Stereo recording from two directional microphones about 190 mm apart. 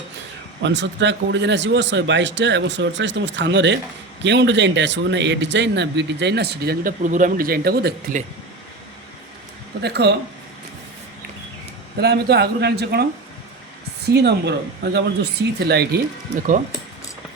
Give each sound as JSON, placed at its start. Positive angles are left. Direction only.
{"t": 0.6, "sound": "speech", "side_deg": -70}
{"t": 9.8, "sound": "speech", "side_deg": -60}
{"t": 11.9, "sound": "speech", "side_deg": -60}
{"t": 16.3, "sound": "speech", "side_deg": -40}